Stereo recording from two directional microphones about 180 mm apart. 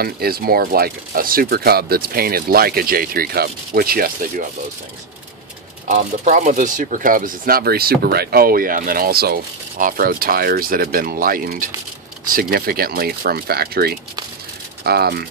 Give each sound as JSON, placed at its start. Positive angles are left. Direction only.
{"t": 0.0, "sound": "speech", "side_deg": -55}
{"t": 5.9, "sound": "speech", "side_deg": -45}